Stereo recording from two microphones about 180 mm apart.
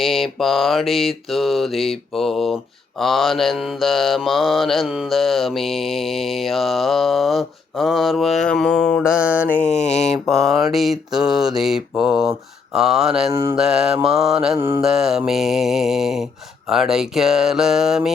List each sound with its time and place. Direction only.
0.0 s mantra: centre (ahead or behind)
9.8 s mantra: 35° left (ahead or behind)
10.3 s mantra: centre (ahead or behind)